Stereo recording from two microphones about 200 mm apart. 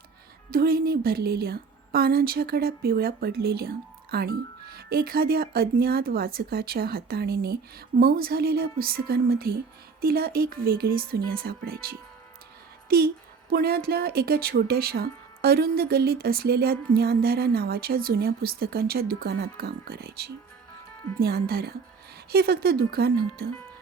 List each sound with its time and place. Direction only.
0.5 s speech: 50° right (ahead or behind)